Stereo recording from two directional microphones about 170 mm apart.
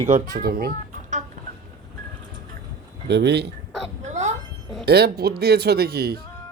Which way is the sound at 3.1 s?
80° right.